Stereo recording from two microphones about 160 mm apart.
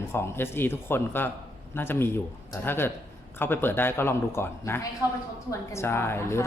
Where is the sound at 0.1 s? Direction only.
15° left (ahead or behind).